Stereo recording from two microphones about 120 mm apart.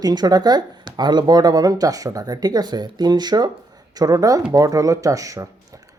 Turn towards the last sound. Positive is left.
turn(degrees=-30)  # may be behind; listen again after turning